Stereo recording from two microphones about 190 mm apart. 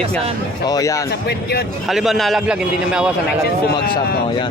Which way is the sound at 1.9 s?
Centre (ahead or behind).